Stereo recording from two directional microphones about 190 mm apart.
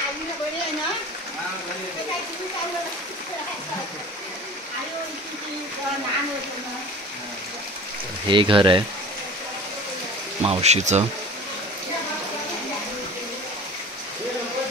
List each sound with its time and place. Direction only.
8.3 s speech: 25° right (ahead or behind)
10.4 s speech: 35° right (ahead or behind)